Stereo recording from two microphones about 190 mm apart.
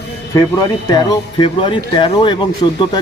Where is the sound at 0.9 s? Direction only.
25° left (ahead or behind).